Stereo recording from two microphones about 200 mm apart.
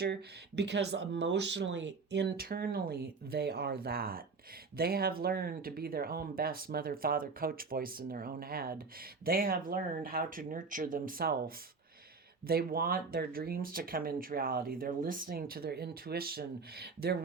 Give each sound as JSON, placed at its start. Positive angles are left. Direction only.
{"t": 0.0, "sound": "speech", "side_deg": -55}